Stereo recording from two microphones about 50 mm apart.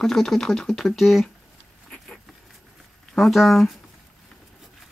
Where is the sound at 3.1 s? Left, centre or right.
Centre.